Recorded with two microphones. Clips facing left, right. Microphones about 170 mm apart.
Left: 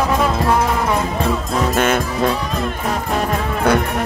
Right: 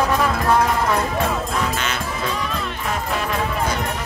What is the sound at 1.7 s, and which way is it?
Music, 50° left (ahead or behind).